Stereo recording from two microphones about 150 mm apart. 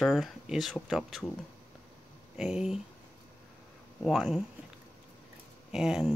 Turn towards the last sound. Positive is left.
turn(degrees=-5)  # may be behind; listen again after turning